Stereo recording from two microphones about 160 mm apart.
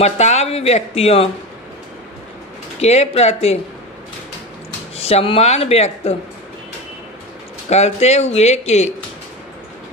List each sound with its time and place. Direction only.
0.0 s speech: 45° left (ahead or behind)
2.8 s speech: 40° left (ahead or behind)
4.9 s speech: 40° left (ahead or behind)
7.7 s speech: 45° left (ahead or behind)